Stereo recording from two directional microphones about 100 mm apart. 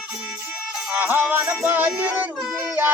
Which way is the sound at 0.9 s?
20° right (ahead or behind).